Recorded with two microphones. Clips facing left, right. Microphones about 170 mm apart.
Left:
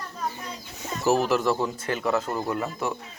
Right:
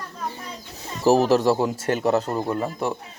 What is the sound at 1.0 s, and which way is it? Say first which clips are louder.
Speech: right 5 dB; 35° right (ahead or behind).